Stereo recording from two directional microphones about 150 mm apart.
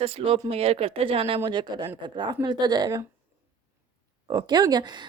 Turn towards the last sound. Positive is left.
turn(degrees=-30)  # may be behind; listen again after turning